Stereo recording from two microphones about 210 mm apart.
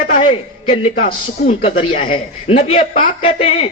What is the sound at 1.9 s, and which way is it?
A man's voice, 25° left (ahead or behind).